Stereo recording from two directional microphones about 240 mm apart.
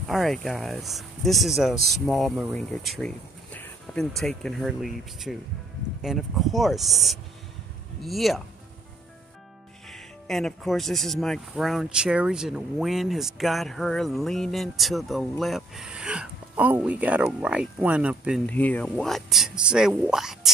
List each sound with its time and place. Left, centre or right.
0.1 s speech: centre
9.8 s speech: centre
18.5 s speech: centre